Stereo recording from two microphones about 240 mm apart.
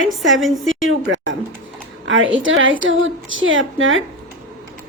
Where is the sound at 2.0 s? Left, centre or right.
Right.